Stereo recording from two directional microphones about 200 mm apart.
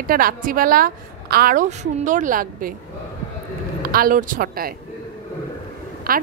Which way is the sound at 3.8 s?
45° right (ahead or behind).